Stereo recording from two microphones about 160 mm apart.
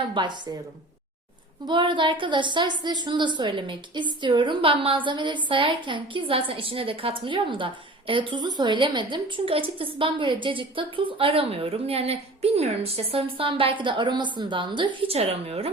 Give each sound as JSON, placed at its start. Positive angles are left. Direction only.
{"t": 0.1, "sound": "a woman's voice", "side_deg": -30}
{"t": 1.6, "sound": "a woman's voice", "side_deg": -30}